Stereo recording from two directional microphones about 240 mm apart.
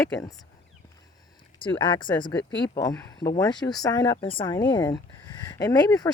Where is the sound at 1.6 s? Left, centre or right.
Centre.